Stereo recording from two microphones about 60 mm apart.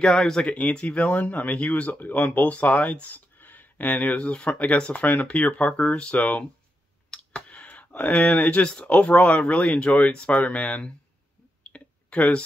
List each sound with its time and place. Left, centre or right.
0.0 s speech: centre
0.5 s speech: left
11.6 s clicking: left